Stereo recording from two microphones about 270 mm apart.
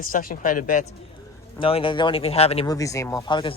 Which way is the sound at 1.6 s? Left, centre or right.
Centre.